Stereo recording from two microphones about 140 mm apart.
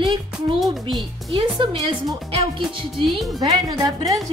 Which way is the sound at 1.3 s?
35° right (ahead or behind).